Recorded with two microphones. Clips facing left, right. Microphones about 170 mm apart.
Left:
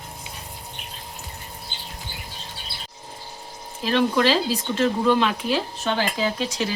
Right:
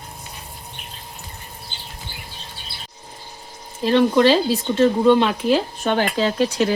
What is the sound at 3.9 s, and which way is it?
Speech, 35° right (ahead or behind).